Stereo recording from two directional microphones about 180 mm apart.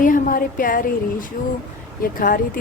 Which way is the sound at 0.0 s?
50° left (ahead or behind).